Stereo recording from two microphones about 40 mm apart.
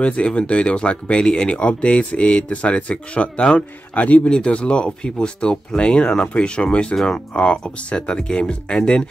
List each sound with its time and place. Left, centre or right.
0.0 s speech: left